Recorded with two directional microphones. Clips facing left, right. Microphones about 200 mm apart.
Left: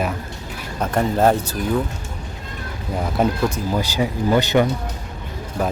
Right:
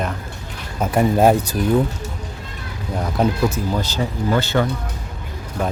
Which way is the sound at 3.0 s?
5° left (ahead or behind).